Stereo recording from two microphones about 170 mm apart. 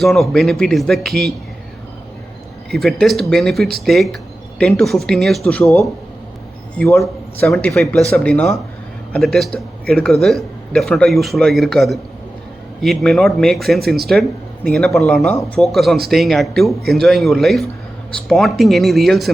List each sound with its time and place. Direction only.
0.0 s a man's voice: centre (ahead or behind)
2.7 s a man's voice: centre (ahead or behind)
7.7 s a man's voice: centre (ahead or behind)